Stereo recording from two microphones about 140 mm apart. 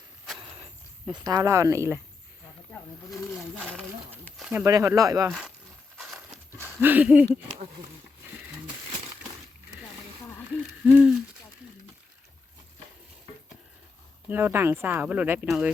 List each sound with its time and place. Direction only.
1.0 s speech: 30° right (ahead or behind)
3.1 s speech: centre (ahead or behind)
4.4 s a sound: 5° right (ahead or behind)
4.6 s speech: 20° right (ahead or behind)
6.1 s a sound: 15° right (ahead or behind)
10.5 s hoot: 5° right (ahead or behind)
14.3 s speech: 15° right (ahead or behind)